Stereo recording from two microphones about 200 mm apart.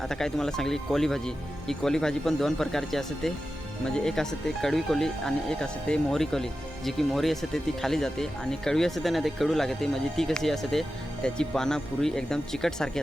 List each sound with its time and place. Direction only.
0.0 s speech: centre (ahead or behind)